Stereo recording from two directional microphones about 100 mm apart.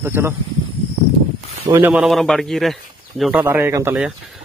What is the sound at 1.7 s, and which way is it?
Speech, 40° right (ahead or behind).